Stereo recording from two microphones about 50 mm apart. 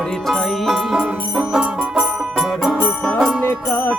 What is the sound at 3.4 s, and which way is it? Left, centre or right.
Music, left.